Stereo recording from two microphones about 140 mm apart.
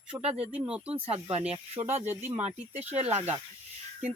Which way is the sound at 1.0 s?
45° right (ahead or behind).